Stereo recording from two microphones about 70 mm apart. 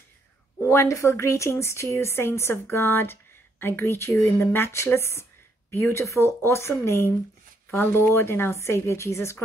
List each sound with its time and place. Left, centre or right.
0.6 s speech: left